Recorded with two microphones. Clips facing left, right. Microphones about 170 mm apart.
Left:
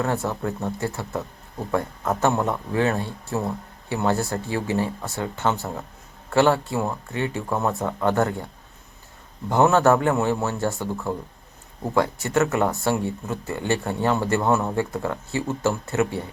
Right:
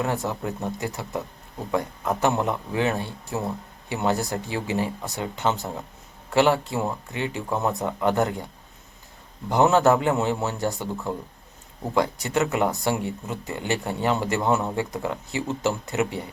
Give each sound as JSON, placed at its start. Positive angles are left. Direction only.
{"t": 0.0, "sound": "speech", "side_deg": -15}
{"t": 2.2, "sound": "speech", "side_deg": -15}
{"t": 9.5, "sound": "speech", "side_deg": -15}